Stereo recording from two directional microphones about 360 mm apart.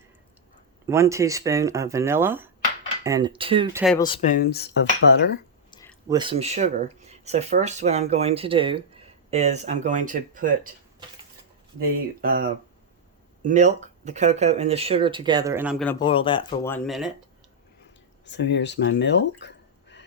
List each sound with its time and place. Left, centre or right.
0.9 s speech: centre
3.9 s speech: centre; by 5.3 s left
5.7 s a sound: centre
6.1 s speech: centre
11.8 s speech: right; by 17.1 s centre
18.3 s speech: left